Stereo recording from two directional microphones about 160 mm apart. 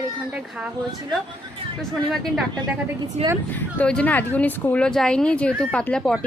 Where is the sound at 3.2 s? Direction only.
45° right (ahead or behind).